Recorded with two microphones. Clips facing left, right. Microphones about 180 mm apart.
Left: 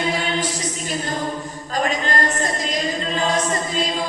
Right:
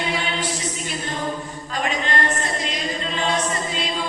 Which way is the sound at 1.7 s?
40° left (ahead or behind).